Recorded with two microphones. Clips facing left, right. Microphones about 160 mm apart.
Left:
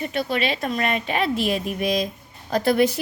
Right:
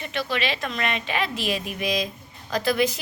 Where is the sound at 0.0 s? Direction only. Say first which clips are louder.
Left 3 dB; 45° left (ahead or behind).